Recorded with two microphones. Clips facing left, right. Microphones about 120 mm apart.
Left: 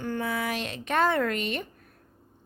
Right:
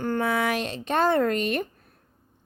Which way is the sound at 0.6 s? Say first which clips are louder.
Right 2 dB; 30° right (ahead or behind).